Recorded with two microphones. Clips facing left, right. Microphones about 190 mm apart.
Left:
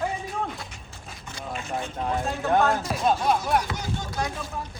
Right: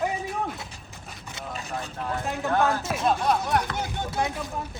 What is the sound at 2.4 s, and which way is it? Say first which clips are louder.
Speech: left 2 dB; 20° left (ahead or behind).